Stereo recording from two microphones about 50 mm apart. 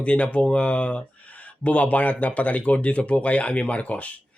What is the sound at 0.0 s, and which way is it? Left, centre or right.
A man's voice, left.